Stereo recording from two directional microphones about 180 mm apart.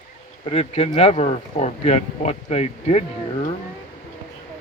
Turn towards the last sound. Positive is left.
turn(degrees=35)  # may be behind; listen again after turning